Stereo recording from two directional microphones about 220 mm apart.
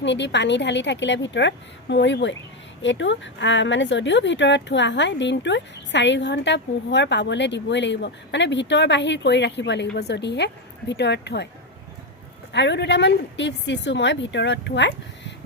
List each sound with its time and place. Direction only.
0.0 s speech: 55° left (ahead or behind)
12.5 s speech: 50° left (ahead or behind)